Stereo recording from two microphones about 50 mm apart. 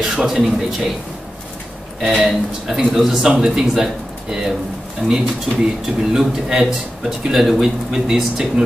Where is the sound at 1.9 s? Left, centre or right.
Centre.